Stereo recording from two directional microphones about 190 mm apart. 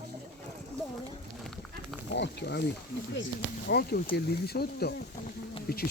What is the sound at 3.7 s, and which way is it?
Speech, 55° left (ahead or behind).